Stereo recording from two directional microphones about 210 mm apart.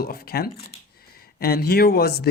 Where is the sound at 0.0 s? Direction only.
45° left (ahead or behind).